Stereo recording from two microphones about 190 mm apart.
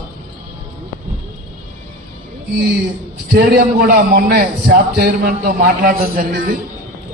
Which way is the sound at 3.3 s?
55° right (ahead or behind).